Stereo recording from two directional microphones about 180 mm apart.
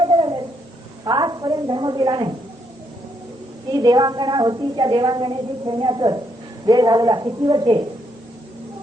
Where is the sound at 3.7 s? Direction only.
20° right (ahead or behind).